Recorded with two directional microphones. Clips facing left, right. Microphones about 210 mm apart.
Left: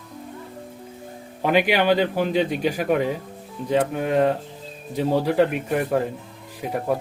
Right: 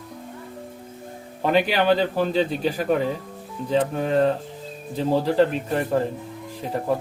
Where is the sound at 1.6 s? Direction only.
35° right (ahead or behind).